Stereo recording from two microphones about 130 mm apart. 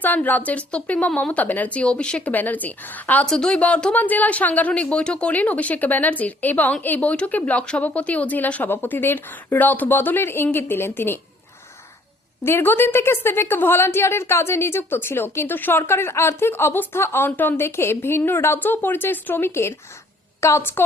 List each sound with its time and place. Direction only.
0.0 s speech: 15° left (ahead or behind)
12.5 s a woman's voice: 15° left (ahead or behind)